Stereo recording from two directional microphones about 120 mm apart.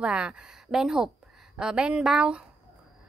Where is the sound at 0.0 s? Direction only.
5° right (ahead or behind).